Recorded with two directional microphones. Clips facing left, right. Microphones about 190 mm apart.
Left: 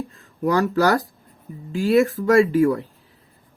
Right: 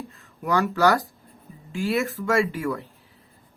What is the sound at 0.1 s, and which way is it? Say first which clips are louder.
Speech: left 3 dB; 35° left (ahead or behind).